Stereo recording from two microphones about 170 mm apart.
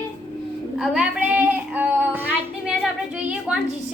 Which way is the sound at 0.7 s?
Centre (ahead or behind).